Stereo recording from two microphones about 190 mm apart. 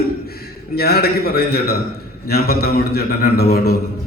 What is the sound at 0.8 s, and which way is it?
A man's voice, 55° left (ahead or behind).